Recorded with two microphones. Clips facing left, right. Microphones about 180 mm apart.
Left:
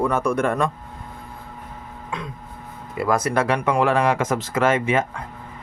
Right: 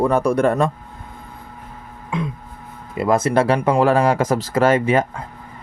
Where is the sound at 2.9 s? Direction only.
25° right (ahead or behind).